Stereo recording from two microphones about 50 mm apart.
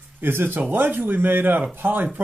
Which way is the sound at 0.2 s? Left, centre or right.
Right.